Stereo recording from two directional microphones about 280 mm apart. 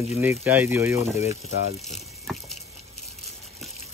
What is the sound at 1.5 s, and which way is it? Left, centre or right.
Speech, left.